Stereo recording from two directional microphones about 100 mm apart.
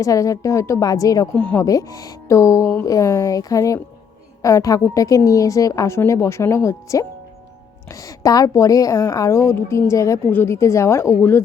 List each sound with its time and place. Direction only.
0.0 s a woman's voice: 35° left (ahead or behind)
1.4 s speech: 15° left (ahead or behind)
1.6 s a woman's voice: 35° left (ahead or behind)